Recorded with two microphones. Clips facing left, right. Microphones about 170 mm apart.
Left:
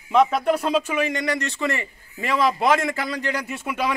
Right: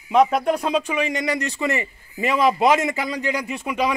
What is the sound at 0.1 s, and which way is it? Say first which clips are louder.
A man's voice: right 1 dB; centre (ahead or behind).